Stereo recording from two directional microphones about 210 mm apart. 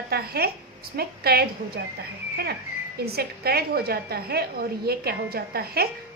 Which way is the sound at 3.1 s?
50° right (ahead or behind).